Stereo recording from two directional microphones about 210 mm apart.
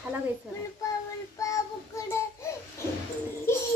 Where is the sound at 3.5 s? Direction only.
10° left (ahead or behind).